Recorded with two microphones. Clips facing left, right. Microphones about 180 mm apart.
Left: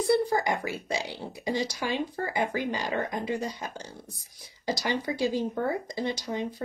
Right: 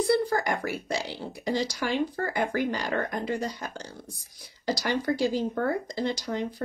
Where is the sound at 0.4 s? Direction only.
20° left (ahead or behind).